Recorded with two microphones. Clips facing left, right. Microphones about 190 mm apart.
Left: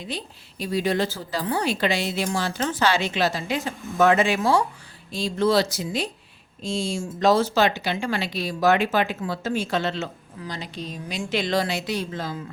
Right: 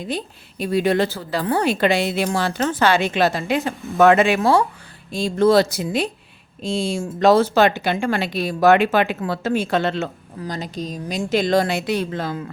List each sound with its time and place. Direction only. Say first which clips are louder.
0.6 s speech: right 5 dB; 60° right (ahead or behind)